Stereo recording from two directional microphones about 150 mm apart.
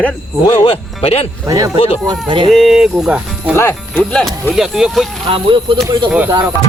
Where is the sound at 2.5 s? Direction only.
Centre (ahead or behind).